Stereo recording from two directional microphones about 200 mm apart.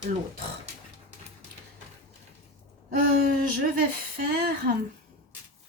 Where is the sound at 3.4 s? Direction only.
45° right (ahead or behind).